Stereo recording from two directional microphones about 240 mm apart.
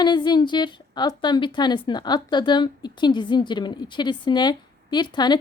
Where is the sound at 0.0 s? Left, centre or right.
Centre.